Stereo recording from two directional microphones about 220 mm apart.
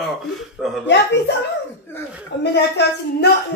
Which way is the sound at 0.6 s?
Centre (ahead or behind).